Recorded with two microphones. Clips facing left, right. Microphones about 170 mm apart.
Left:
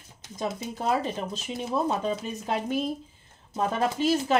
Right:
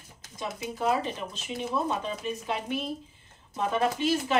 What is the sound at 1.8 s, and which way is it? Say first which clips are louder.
Speech: left 3 dB; 40° left (ahead or behind).